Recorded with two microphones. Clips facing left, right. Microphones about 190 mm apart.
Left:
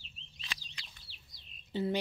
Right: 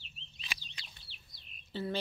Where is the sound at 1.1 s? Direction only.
40° left (ahead or behind).